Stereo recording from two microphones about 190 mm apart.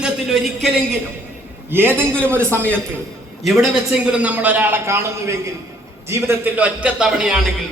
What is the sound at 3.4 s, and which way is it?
A man's voice, centre (ahead or behind).